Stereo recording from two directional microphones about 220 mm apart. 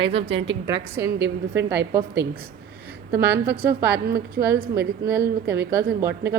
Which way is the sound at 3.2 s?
45° right (ahead or behind).